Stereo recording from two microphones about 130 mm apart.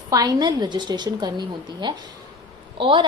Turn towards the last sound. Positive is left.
turn(degrees=-40)  # may be behind; listen again after turning